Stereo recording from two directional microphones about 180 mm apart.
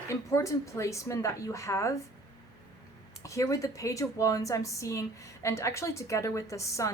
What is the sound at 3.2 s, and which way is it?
A woman's voice, 15° left (ahead or behind).